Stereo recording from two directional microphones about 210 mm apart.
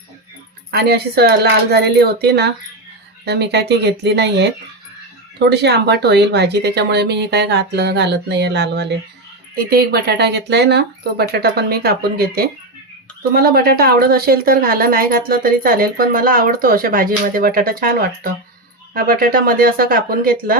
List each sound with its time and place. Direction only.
0.7 s a woman's voice: 50° right (ahead or behind)